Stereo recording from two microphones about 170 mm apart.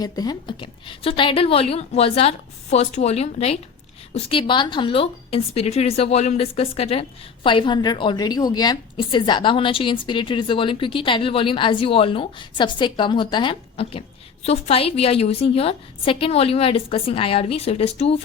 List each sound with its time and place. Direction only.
0.0 s a woman's voice: 25° left (ahead or behind); by 18.2 s 40° left (ahead or behind)